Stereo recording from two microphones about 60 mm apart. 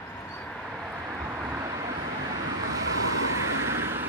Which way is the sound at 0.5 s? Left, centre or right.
Centre.